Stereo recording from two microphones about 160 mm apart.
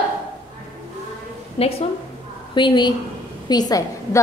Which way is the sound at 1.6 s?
40° left (ahead or behind).